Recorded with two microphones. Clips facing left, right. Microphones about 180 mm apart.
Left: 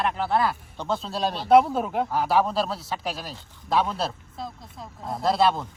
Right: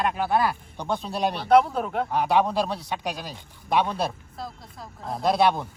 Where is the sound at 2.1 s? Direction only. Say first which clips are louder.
Right 3 dB; 20° right (ahead or behind).